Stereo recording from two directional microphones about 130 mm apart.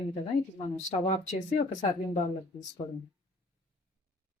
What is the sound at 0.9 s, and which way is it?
Speech, 65° left (ahead or behind).